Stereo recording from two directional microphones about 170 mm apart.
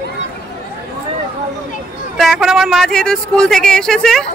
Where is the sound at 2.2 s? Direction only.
Centre (ahead or behind).